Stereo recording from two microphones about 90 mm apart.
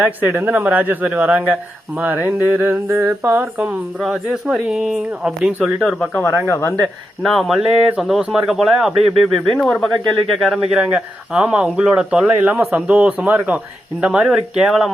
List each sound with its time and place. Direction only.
0.0 s speech: 20° right (ahead or behind)
4.0 s speech: 5° right (ahead or behind)
6.5 s speech: 25° left (ahead or behind)
7.2 s speech: centre (ahead or behind)